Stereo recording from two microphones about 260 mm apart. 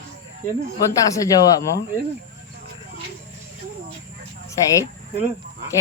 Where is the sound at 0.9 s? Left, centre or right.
Centre.